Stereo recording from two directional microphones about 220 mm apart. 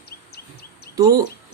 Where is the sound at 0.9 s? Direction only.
15° right (ahead or behind).